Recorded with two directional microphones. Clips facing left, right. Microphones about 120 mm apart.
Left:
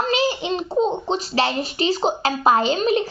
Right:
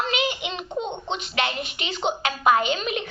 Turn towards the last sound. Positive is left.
turn(degrees=35)  # may be behind; listen again after turning